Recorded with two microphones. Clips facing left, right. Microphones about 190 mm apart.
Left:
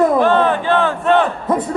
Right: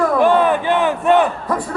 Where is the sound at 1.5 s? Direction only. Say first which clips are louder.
Left 4 dB; 20° left (ahead or behind).